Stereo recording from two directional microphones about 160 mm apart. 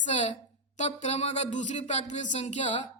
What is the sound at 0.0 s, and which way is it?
Speech, 45° left (ahead or behind).